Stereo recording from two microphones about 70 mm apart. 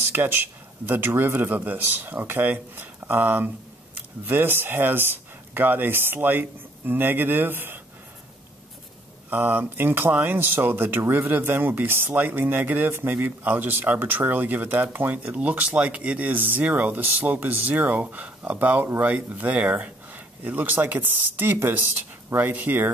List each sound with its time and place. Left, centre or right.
0.1 s speech: right
9.3 s speech: right